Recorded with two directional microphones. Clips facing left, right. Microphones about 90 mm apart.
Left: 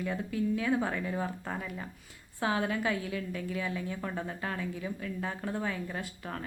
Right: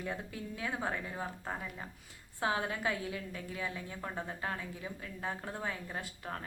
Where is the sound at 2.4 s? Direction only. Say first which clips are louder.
Left 3 dB; 20° right (ahead or behind).